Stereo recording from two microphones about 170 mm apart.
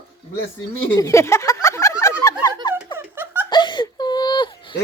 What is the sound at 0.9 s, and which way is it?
Speech, 15° left (ahead or behind).